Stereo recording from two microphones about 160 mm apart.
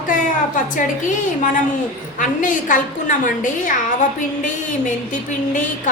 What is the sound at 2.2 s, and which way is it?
A woman's voice, 55° left (ahead or behind).